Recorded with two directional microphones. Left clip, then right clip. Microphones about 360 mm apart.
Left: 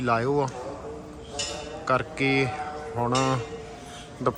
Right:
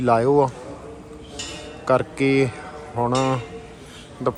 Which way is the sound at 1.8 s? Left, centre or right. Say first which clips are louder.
Right 5 dB; centre.